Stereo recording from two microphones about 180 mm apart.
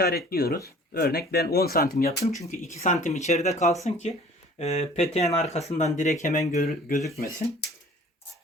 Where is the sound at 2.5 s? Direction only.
40° left (ahead or behind).